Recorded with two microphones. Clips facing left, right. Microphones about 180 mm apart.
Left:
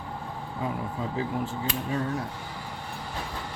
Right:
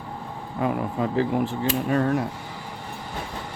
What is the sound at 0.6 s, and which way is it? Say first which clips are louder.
Speech: right 7 dB; 65° right (ahead or behind).